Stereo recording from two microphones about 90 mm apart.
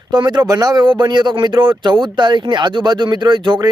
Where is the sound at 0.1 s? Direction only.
55° right (ahead or behind).